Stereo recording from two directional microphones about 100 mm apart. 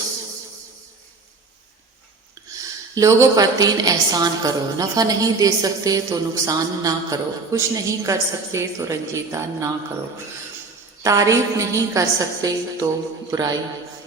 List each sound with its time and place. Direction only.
2.5 s a woman's voice: 35° right (ahead or behind)
11.0 s a woman's voice: 30° right (ahead or behind)